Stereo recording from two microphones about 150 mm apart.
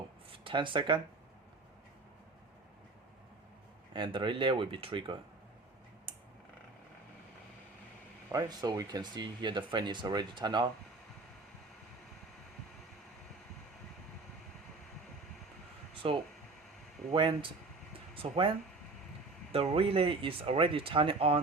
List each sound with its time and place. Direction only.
0.3 s speech: 35° right (ahead or behind)
3.9 s speech: 30° right (ahead or behind)
8.3 s speech: 25° right (ahead or behind)
16.0 s speech: 40° right (ahead or behind)